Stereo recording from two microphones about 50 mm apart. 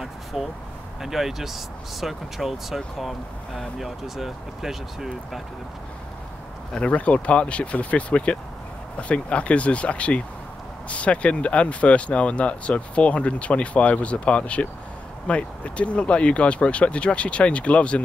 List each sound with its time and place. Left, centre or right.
0.0 s a sound: centre
1.0 s speech: centre
6.7 s speech: left